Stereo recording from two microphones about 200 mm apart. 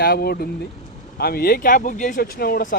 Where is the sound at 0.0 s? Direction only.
50° left (ahead or behind).